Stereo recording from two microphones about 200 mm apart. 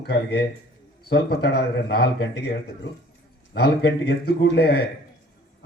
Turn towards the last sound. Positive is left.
turn(degrees=55)  # may be behind; listen again after turning